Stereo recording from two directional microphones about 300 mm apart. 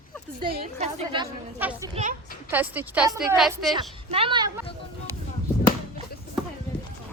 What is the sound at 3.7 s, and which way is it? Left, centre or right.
Speech, centre.